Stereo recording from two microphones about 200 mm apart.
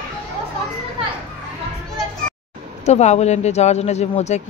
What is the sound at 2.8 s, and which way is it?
Speech, 35° left (ahead or behind).